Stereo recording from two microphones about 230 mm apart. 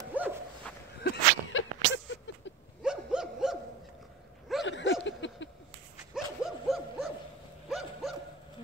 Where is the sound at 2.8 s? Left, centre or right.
Centre.